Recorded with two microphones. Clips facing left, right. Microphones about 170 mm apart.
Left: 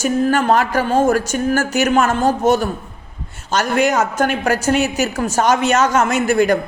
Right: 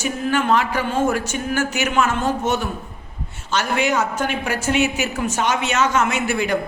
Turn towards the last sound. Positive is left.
turn(degrees=40)  # may be behind; listen again after turning